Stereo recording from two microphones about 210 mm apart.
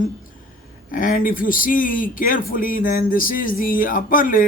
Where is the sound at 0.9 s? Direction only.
40° left (ahead or behind).